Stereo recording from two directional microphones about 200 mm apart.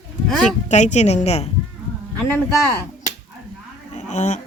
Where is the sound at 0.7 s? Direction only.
35° left (ahead or behind).